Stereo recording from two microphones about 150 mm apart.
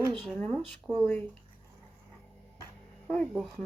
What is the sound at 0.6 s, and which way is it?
Speech, 5° right (ahead or behind).